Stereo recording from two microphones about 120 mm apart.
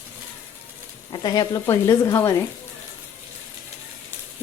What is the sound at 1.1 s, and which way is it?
Speech, 35° left (ahead or behind).